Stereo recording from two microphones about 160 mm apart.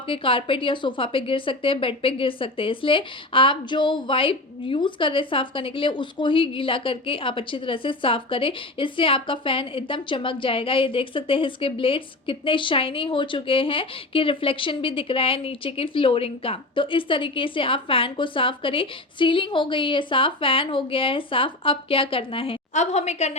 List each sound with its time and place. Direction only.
0.1 s a woman's voice: 35° left (ahead or behind)